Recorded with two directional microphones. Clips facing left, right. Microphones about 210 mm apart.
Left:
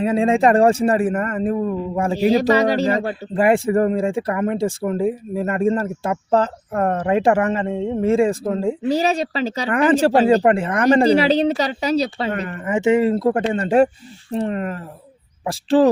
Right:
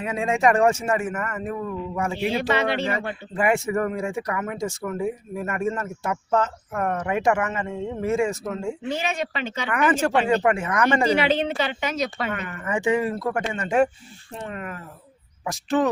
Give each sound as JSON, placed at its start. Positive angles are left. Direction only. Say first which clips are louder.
{"t": 0.0, "sound": "speech", "louder": "left 6 dB", "side_deg": 30}
{"t": 12.6, "sound": "speech", "louder": "left 6 dB", "side_deg": 20}